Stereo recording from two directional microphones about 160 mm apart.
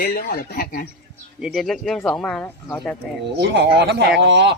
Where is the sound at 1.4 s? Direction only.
Centre (ahead or behind).